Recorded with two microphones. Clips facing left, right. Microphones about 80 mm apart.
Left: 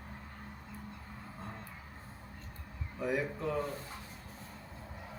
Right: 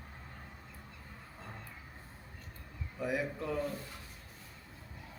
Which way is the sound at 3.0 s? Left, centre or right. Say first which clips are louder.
Left 1 dB; centre.